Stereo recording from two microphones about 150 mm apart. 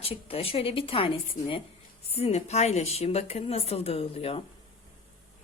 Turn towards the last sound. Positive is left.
turn(degrees=40)  # may be behind; listen again after turning